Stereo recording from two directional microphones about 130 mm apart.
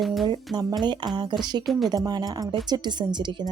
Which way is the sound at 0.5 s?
35° right (ahead or behind).